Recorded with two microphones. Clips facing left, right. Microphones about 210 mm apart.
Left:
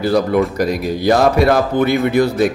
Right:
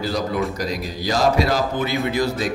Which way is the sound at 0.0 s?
60° left (ahead or behind).